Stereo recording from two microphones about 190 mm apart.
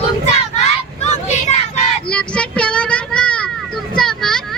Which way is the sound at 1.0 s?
35° left (ahead or behind).